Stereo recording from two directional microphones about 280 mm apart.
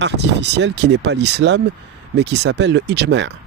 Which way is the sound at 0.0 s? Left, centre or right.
Right.